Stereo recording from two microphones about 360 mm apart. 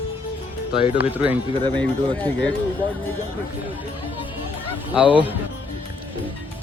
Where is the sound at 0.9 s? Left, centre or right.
Centre.